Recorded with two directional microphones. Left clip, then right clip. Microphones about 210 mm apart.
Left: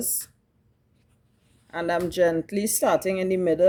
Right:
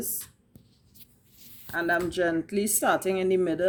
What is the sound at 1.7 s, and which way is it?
Speech, 45° left (ahead or behind).